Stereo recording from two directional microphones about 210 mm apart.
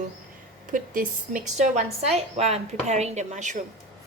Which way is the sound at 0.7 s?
40° right (ahead or behind).